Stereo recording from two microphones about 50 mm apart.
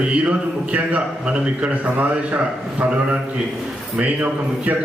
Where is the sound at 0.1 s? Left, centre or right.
Right.